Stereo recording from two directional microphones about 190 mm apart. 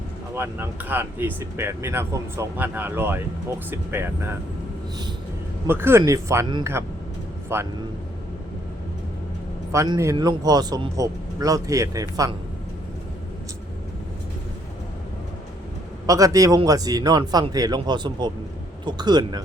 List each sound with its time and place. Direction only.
0.3 s speech: 10° right (ahead or behind)
5.6 s speech: 10° right (ahead or behind)
9.7 s speech: 20° right (ahead or behind)
16.0 s speech: 20° right (ahead or behind)